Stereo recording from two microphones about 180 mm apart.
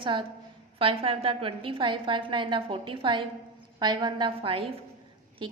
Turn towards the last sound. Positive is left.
turn(degrees=-25)  # may be behind; listen again after turning